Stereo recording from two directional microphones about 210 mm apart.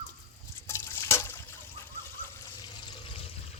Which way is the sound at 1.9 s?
15° left (ahead or behind).